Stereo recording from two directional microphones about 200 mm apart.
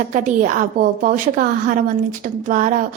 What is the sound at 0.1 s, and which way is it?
A woman's voice, 40° right (ahead or behind).